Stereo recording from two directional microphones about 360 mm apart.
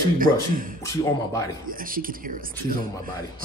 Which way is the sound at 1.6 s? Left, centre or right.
Right.